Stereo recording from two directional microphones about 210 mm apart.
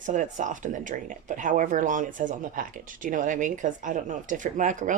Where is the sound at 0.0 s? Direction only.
35° right (ahead or behind).